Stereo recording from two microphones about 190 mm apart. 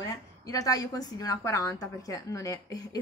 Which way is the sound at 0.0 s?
20° left (ahead or behind).